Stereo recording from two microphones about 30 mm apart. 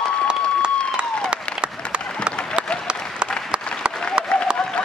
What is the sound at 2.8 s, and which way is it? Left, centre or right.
Applause, right.